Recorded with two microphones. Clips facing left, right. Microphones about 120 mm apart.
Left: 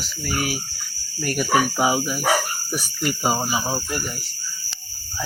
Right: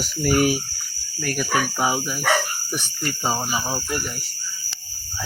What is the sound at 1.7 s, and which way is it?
Speech, 5° left (ahead or behind).